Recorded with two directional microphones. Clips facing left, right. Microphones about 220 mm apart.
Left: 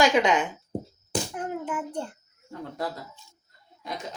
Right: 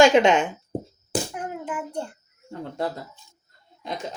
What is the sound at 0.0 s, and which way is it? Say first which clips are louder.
Speech: right 5 dB; 25° right (ahead or behind).